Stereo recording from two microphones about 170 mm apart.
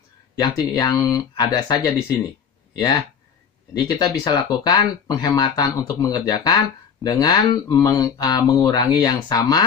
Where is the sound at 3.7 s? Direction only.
25° left (ahead or behind).